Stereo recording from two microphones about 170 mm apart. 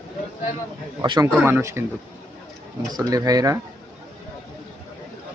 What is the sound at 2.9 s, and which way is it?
Speech, 20° right (ahead or behind).